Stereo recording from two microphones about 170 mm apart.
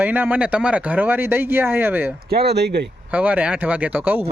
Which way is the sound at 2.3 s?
75° right (ahead or behind).